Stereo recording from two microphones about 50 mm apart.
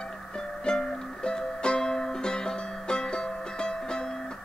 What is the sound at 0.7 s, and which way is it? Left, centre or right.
Music, centre.